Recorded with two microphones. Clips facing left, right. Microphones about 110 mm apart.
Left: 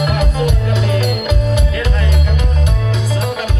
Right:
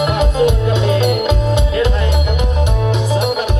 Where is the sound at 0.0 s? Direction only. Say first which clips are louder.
Right 3 dB; 25° right (ahead or behind).